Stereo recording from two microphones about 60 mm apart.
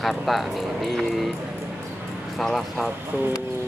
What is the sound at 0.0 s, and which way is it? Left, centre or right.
Speech, centre.